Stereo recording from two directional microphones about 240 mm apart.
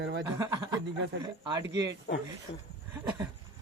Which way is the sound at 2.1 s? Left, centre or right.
Left.